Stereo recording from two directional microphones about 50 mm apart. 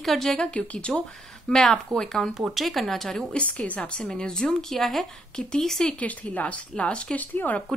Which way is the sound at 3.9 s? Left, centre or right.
Centre.